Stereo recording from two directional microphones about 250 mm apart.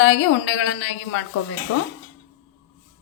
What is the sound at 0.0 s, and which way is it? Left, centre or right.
A woman's voice, left.